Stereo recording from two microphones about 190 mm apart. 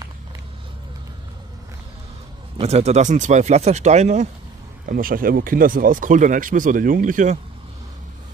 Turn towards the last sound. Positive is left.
turn(degrees=-40)  # may be behind; listen again after turning